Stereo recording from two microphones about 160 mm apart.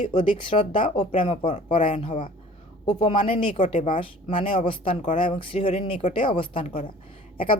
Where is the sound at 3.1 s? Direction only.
35° left (ahead or behind).